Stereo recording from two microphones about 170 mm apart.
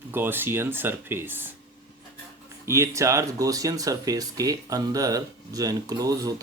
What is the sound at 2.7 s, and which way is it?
Speech, 15° right (ahead or behind).